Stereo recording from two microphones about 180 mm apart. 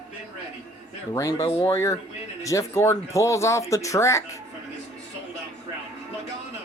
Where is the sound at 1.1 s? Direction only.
20° left (ahead or behind).